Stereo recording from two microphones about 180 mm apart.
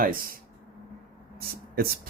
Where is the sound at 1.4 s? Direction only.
55° right (ahead or behind).